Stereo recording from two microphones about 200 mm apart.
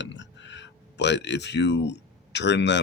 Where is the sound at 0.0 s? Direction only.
65° left (ahead or behind).